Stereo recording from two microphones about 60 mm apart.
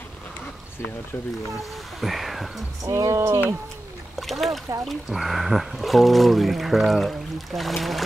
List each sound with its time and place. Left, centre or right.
2.0 s speech: centre
2.8 s speech: right
4.2 s speech: centre